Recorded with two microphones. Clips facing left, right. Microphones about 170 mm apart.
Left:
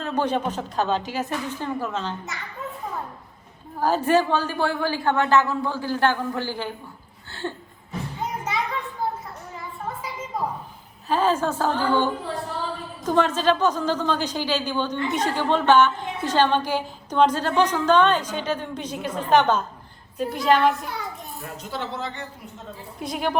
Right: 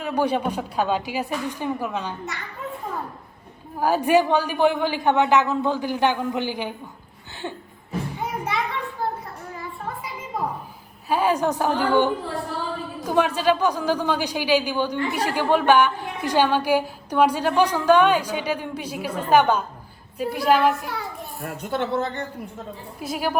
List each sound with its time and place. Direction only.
0.0 s a woman's voice: 10° right (ahead or behind)
3.8 s a woman's voice: 15° right (ahead or behind)
11.1 s a woman's voice: 10° right (ahead or behind)
21.4 s speech: 55° right (ahead or behind)
23.0 s a woman's voice: 5° right (ahead or behind)